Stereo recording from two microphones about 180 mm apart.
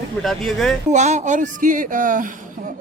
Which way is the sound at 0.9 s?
40° right (ahead or behind).